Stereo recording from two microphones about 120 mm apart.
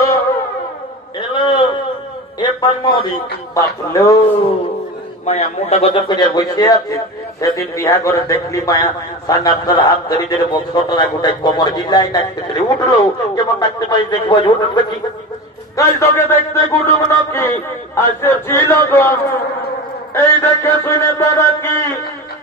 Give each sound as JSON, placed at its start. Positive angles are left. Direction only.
{"t": 1.3, "sound": "a sound", "side_deg": 40}
{"t": 2.4, "sound": "a man's voice", "side_deg": 40}
{"t": 3.9, "sound": "a man's voice", "side_deg": 25}
{"t": 5.2, "sound": "a man's voice", "side_deg": 60}
{"t": 5.9, "sound": "a man's voice", "side_deg": 40}
{"t": 15.7, "sound": "a man's voice", "side_deg": 25}
{"t": 20.2, "sound": "a man's voice", "side_deg": 25}